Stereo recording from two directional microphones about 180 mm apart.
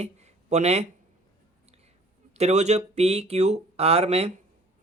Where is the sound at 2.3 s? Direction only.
35° right (ahead or behind).